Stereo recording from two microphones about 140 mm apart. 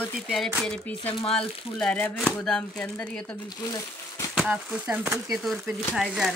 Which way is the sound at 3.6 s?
30° left (ahead or behind).